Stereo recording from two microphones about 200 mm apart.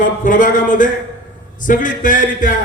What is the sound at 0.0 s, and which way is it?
Speech, 40° left (ahead or behind).